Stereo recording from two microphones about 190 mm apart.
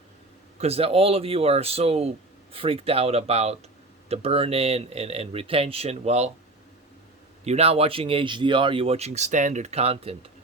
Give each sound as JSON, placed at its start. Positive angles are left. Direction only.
{"t": 0.6, "sound": "a man's voice", "side_deg": -30}
{"t": 7.4, "sound": "a man's voice", "side_deg": -35}